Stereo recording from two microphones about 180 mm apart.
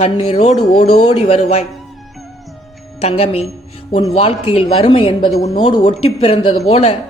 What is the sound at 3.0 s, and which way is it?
Speech, 35° left (ahead or behind).